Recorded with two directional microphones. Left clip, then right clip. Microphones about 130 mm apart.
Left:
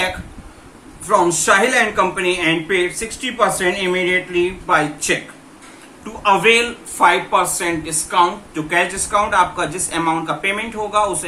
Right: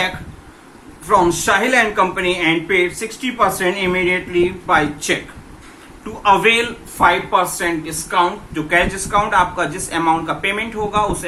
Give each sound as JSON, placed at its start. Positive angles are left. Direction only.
{"t": 1.0, "sound": "speech", "side_deg": -30}
{"t": 6.2, "sound": "speech", "side_deg": -25}